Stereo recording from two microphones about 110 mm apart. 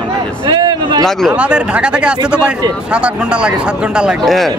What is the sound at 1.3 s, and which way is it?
Speech, 10° right (ahead or behind).